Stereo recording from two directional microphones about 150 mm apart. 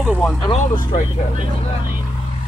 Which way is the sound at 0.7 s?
55° left (ahead or behind).